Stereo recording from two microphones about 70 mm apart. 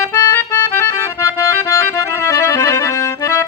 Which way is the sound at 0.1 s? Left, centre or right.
Left.